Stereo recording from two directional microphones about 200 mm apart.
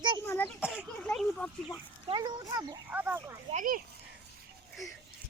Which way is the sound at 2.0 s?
20° right (ahead or behind).